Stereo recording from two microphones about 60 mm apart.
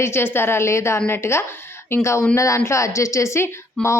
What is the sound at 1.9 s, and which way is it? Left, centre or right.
A woman's voice, left.